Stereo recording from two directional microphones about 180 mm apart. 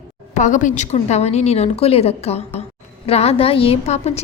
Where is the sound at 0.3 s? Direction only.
45° left (ahead or behind).